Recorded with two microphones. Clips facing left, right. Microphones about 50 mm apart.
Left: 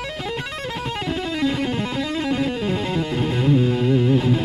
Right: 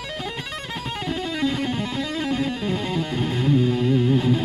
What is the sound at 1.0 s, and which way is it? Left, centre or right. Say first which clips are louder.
Music: left 1 dB; centre.